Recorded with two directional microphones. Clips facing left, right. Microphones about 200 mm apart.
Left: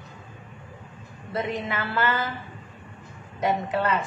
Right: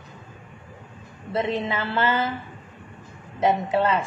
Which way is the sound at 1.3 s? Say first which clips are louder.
Right 4 dB; 25° right (ahead or behind).